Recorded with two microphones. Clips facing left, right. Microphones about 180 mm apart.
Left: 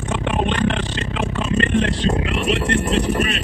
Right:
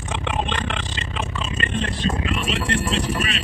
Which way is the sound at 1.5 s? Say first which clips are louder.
Left 8 dB; 70° left (ahead or behind).